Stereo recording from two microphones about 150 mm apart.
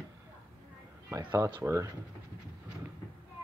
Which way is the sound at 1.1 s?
15° right (ahead or behind).